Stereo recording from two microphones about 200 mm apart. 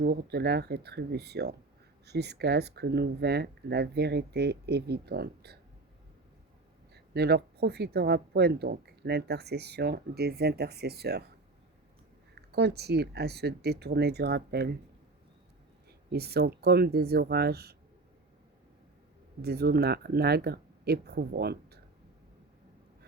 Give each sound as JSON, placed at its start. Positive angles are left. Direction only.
{"t": 0.0, "sound": "speech", "side_deg": -55}
{"t": 6.9, "sound": "speech", "side_deg": -55}
{"t": 12.3, "sound": "speech", "side_deg": -55}
{"t": 16.1, "sound": "speech", "side_deg": -55}
{"t": 19.4, "sound": "speech", "side_deg": -55}